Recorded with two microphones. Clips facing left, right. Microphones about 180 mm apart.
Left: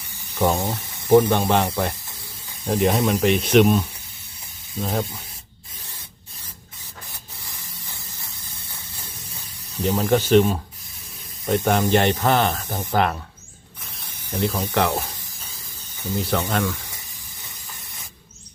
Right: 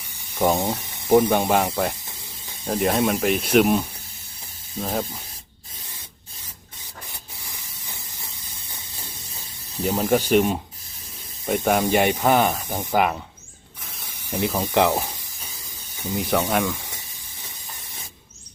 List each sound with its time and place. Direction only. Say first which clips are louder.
0.3 s speech: even; 15° right (ahead or behind)
2.6 s speech: left 1 dB; centre (ahead or behind)
4.8 s speech: left 1 dB; centre (ahead or behind)
9.8 s speech: left 1 dB; 5° right (ahead or behind)
14.3 s speech: even; 15° right (ahead or behind)